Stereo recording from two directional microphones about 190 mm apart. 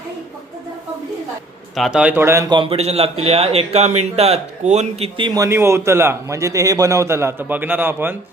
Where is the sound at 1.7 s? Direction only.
Centre (ahead or behind).